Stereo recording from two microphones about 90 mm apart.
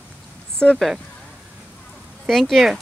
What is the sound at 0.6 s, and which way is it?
Speech, 10° left (ahead or behind).